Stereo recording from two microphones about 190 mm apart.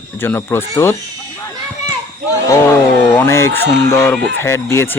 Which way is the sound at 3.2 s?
15° left (ahead or behind).